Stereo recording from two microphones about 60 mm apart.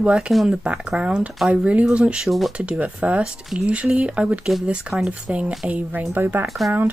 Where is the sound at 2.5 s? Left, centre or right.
Right.